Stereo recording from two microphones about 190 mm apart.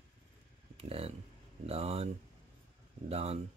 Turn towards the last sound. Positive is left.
turn(degrees=-30)  # may be behind; listen again after turning